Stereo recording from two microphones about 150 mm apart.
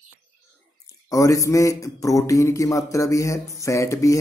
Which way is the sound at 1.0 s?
20° left (ahead or behind).